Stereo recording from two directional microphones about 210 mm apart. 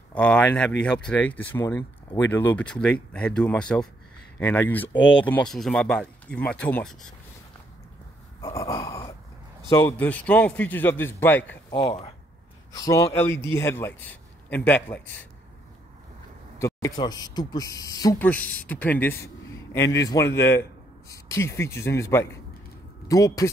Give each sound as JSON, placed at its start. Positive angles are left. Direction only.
{"t": 0.1, "sound": "speech", "side_deg": 5}
{"t": 8.5, "sound": "a sound", "side_deg": 15}
{"t": 9.7, "sound": "speech", "side_deg": 15}
{"t": 11.7, "sound": "speech", "side_deg": 30}
{"t": 12.7, "sound": "speech", "side_deg": 15}
{"t": 16.5, "sound": "speech", "side_deg": 15}